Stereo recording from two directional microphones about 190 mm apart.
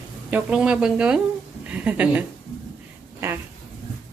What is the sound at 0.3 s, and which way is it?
A woman's voice, 5° right (ahead or behind).